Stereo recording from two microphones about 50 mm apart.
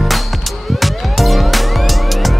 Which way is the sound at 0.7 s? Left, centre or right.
Centre.